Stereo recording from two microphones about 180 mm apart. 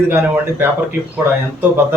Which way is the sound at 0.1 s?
10° right (ahead or behind).